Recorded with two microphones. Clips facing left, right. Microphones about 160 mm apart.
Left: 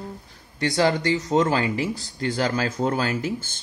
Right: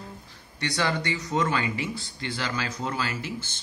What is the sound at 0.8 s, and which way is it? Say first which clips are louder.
Speech: left 7 dB; 35° left (ahead or behind).